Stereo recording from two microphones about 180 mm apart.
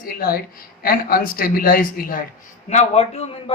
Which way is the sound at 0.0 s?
55° left (ahead or behind).